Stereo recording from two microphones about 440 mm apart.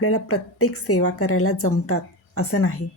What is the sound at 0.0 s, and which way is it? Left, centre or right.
A woman's voice, left.